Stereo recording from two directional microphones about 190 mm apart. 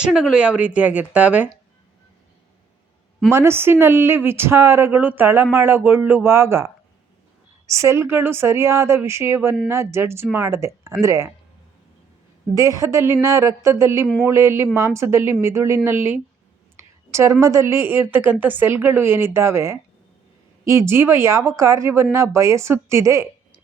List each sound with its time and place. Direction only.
0.0 s speech: 5° right (ahead or behind)
3.3 s speech: 15° right (ahead or behind)
7.7 s speech: 15° right (ahead or behind)
12.5 s speech: 15° right (ahead or behind)
16.7 s a sound: 15° right (ahead or behind)
17.4 s speech: 15° right (ahead or behind)